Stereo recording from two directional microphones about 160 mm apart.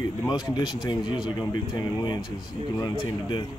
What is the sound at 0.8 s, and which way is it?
Speech, 25° left (ahead or behind).